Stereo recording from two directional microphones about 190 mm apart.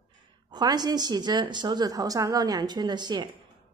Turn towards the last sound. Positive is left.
turn(degrees=-25)  # may be behind; listen again after turning